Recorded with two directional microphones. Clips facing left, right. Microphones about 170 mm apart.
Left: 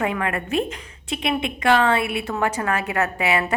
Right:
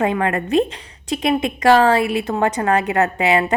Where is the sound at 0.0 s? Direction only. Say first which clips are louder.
Right 5 dB; 35° right (ahead or behind).